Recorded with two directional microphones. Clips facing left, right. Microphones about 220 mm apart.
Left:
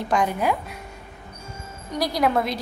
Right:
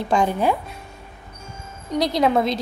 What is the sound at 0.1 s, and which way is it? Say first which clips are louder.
Speech: right 3 dB; 30° right (ahead or behind).